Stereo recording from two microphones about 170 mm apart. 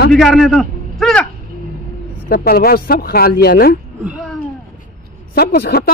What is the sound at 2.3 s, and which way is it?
Speech, 65° left (ahead or behind).